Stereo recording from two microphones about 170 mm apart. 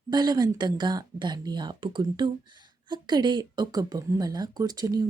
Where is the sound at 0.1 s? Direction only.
25° right (ahead or behind).